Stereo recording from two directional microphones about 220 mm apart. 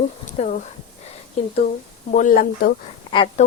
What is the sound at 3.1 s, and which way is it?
Speech, 20° left (ahead or behind).